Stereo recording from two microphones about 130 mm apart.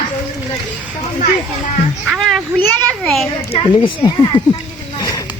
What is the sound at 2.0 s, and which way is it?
Children playing, 5° right (ahead or behind).